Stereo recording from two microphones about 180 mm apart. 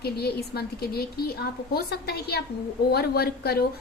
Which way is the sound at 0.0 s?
60° left (ahead or behind).